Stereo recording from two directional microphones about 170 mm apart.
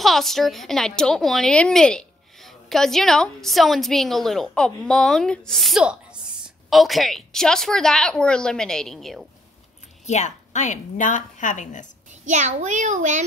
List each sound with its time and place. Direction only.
0.0 s a woman's voice: centre (ahead or behind)
10.0 s a woman's voice: 45° left (ahead or behind)
12.3 s a child's voice: 45° right (ahead or behind)